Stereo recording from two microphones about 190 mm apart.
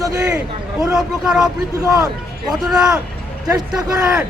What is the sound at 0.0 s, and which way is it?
Speech, 20° right (ahead or behind).